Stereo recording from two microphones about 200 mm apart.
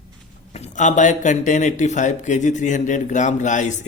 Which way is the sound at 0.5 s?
35° left (ahead or behind).